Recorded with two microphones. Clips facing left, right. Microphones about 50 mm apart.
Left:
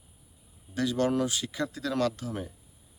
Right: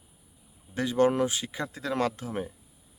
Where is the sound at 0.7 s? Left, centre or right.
Right.